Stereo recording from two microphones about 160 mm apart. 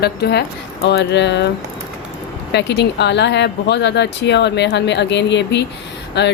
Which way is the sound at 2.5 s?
90° left.